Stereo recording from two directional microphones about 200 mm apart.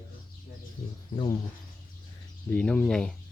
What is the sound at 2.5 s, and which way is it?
Speech, 5° left (ahead or behind).